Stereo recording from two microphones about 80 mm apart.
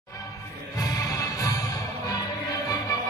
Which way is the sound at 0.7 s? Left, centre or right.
Left.